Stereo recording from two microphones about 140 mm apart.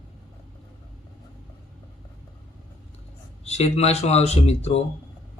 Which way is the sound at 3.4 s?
50° left (ahead or behind).